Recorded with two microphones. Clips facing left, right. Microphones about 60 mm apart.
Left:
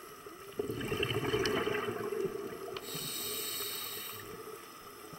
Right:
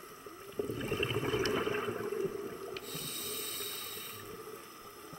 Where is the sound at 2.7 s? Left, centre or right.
Right.